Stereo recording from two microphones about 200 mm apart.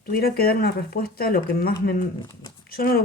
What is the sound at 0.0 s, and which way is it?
Speech, 50° left (ahead or behind).